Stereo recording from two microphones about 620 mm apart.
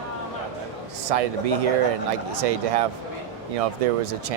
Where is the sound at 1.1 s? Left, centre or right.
Right.